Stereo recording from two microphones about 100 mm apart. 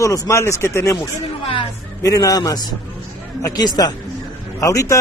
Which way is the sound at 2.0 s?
35° left (ahead or behind).